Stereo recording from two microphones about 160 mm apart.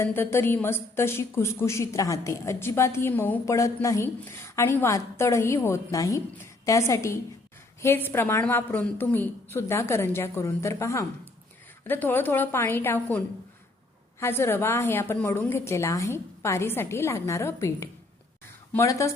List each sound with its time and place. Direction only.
0.0 s a woman's voice: 15° left (ahead or behind)